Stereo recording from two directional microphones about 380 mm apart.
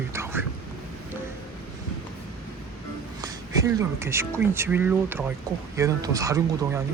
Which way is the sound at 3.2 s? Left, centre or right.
Centre.